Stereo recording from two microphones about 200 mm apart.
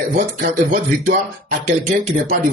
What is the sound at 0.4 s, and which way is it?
Speech, 40° right (ahead or behind).